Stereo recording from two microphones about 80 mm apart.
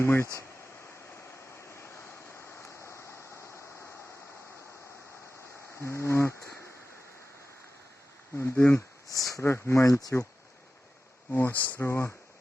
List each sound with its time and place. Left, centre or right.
0.0 s speech: left
1.7 s vehicle: left
5.8 s a sound: left
8.4 s a sound: left
9.3 s speech: left
11.3 s speech: left
11.9 s speech: left